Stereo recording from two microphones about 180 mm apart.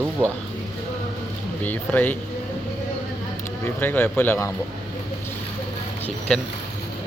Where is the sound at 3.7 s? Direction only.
10° left (ahead or behind).